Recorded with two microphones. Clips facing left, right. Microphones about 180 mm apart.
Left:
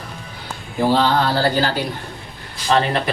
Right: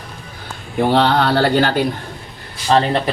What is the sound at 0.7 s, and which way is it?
Speech, 65° right (ahead or behind).